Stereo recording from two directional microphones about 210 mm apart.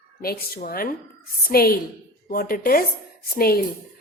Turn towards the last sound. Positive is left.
turn(degrees=45)  # may be behind; listen again after turning